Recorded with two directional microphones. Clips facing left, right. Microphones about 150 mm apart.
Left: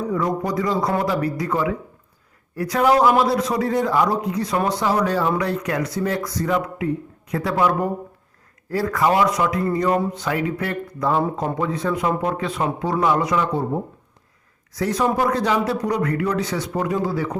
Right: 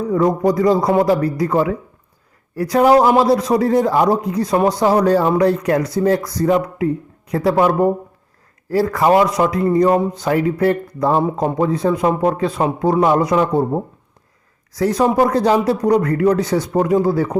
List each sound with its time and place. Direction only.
0.1 s a man's voice: 40° right (ahead or behind)
14.7 s a man's voice: 35° right (ahead or behind)